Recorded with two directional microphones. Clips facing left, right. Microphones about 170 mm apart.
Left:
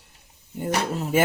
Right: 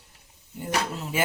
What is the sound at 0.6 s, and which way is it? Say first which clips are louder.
Speech: left 4 dB; 50° left (ahead or behind).